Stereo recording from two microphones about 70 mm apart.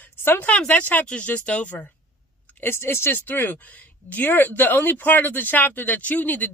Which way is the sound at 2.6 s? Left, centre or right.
Left.